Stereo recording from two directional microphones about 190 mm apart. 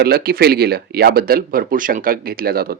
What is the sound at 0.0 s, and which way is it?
Speech, 55° right (ahead or behind).